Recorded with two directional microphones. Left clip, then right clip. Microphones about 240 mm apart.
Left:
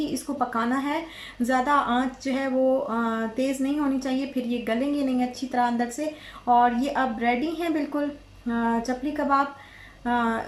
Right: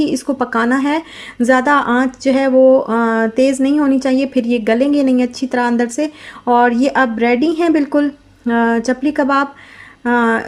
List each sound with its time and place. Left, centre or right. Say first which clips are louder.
0.0 s speech: right 10 dB; right